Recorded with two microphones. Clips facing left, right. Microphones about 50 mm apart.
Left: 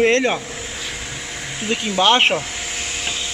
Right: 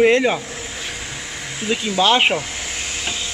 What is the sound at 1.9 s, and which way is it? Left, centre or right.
Speech, left.